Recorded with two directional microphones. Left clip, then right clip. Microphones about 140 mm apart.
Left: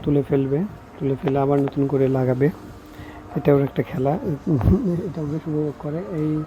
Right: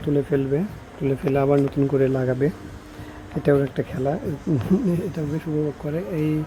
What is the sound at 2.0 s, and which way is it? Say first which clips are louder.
Speech: left 2 dB; 15° left (ahead or behind).